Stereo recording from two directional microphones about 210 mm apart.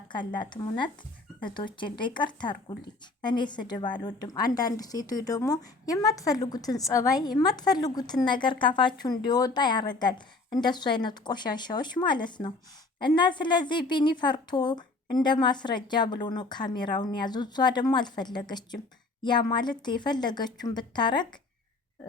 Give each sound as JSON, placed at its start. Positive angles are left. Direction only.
{"t": 0.3, "sound": "a woman's voice", "side_deg": 20}